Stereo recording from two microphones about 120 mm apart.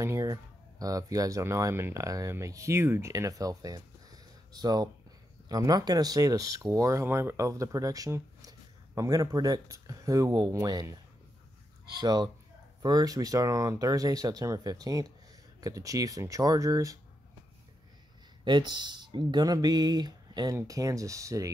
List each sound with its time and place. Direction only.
0.0 s speech: 25° right (ahead or behind)
12.0 s speech: 35° right (ahead or behind)
18.4 s speech: 40° right (ahead or behind)